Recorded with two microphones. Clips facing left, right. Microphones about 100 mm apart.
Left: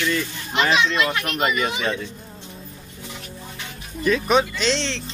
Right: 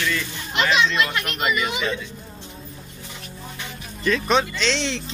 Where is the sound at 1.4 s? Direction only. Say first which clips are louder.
Left 1 dB; 40° left (ahead or behind).